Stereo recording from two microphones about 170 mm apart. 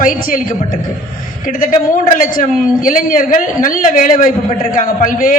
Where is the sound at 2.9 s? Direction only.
50° left (ahead or behind).